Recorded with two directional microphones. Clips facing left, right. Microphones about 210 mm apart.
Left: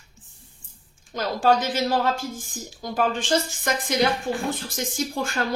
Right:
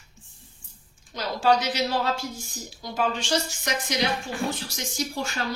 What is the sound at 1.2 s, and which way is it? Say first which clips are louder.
A woman's voice: left 2 dB; 50° left (ahead or behind).